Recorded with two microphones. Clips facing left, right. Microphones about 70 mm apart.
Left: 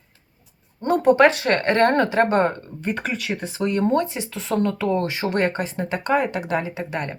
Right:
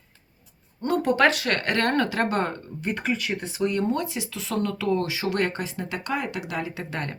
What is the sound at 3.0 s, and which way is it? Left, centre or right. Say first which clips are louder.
Speech: left 1 dB; left.